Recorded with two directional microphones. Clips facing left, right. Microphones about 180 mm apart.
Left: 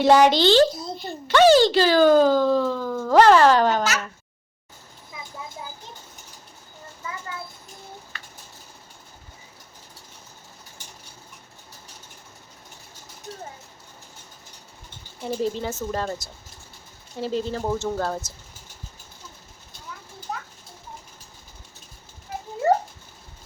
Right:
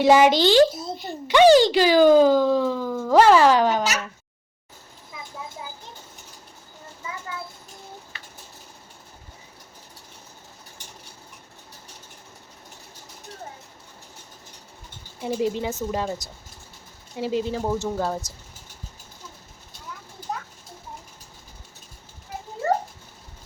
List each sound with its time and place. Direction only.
0.0 s speech: 10° right (ahead or behind)
15.2 s speech: 10° right (ahead or behind)
22.6 s a sound: 20° left (ahead or behind)